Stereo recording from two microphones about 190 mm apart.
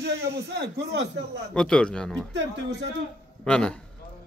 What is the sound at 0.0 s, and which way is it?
A man's voice, 60° right (ahead or behind).